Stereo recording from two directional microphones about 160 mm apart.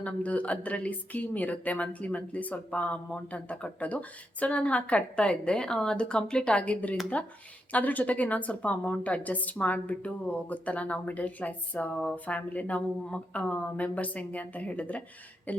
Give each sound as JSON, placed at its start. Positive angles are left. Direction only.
{"t": 0.0, "sound": "a woman's voice", "side_deg": 10}